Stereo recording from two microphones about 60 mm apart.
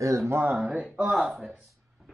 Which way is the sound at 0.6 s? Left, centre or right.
Right.